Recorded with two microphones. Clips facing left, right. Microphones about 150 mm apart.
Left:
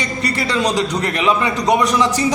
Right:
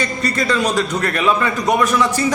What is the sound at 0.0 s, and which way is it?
A man's voice, 15° left (ahead or behind).